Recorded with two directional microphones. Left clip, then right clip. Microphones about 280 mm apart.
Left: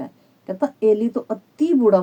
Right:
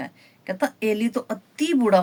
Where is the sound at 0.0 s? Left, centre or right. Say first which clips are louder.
Even; right.